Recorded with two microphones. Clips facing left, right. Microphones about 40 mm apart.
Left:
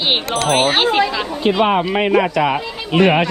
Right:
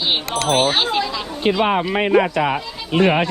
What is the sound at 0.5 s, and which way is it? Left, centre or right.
Speech, left.